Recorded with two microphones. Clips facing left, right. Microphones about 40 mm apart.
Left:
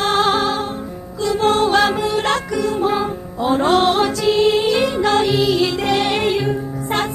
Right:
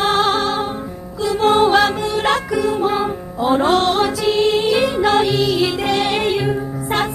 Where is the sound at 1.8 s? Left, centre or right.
Centre.